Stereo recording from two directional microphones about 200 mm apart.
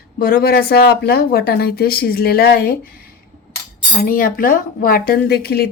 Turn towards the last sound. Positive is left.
turn(degrees=50)  # may be behind; listen again after turning